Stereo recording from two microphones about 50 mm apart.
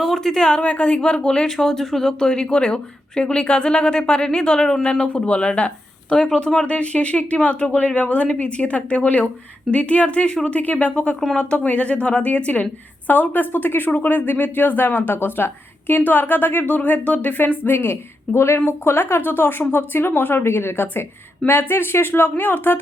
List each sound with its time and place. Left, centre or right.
0.0 s speech: centre
0.6 s speech: left
10.6 s speech: left
18.3 s speech: left